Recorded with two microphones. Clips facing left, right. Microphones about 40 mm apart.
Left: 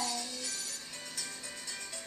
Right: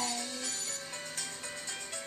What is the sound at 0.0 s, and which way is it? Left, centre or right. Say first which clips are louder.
Music: right 1 dB; right.